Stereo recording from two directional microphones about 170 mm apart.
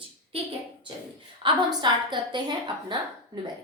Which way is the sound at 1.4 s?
25° right (ahead or behind).